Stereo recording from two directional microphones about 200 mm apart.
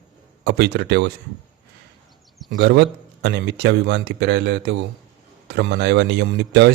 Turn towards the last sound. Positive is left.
turn(degrees=-60)  # may be behind; listen again after turning